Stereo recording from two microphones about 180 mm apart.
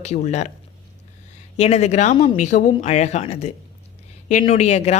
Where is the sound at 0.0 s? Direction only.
40° left (ahead or behind).